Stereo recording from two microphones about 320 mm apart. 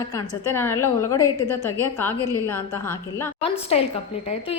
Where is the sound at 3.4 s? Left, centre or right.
Centre.